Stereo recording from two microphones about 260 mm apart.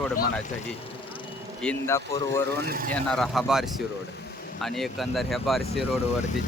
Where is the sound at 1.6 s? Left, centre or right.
Centre.